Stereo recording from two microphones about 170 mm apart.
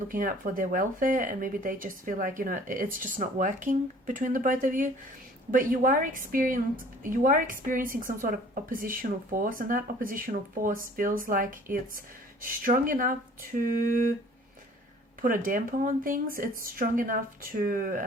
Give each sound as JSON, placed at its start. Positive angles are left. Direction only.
{"t": 0.1, "sound": "a woman's voice", "side_deg": -55}
{"t": 15.2, "sound": "speech", "side_deg": -55}